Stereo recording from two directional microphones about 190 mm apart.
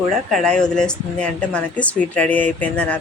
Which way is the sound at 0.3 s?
5° left (ahead or behind).